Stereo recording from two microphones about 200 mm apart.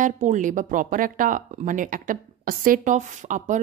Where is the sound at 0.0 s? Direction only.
40° right (ahead or behind).